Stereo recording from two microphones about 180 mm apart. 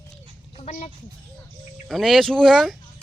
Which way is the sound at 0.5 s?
40° left (ahead or behind).